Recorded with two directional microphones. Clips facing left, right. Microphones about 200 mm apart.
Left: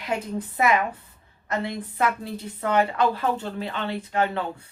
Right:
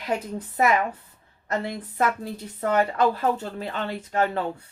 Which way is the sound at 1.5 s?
40° right (ahead or behind).